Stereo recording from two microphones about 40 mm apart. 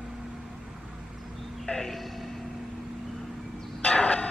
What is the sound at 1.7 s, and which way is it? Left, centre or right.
Music, centre.